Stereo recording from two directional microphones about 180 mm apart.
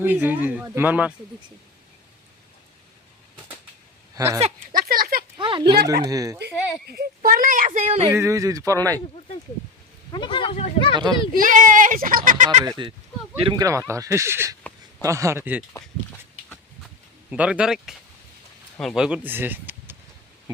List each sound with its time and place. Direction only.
0.0 s speech: 10° right (ahead or behind)
4.1 s speech: 15° right (ahead or behind)
4.4 s speech: 40° right (ahead or behind)
4.8 s speech: 55° right (ahead or behind)
5.4 s a sound: 30° right (ahead or behind)
6.1 s speech: 20° right (ahead or behind)
6.8 s a child's voice: 60° right (ahead or behind); by 8.1 s 40° right (ahead or behind)
8.1 s speech: 15° right (ahead or behind)
10.1 s speech: 25° left (ahead or behind)
10.9 s speech: 25° right (ahead or behind)
11.3 s a child's voice: 45° right (ahead or behind)
13.4 s speech: 20° right (ahead or behind)
17.3 s speech: 5° right (ahead or behind)